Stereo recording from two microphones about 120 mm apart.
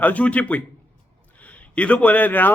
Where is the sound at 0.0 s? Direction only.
10° left (ahead or behind).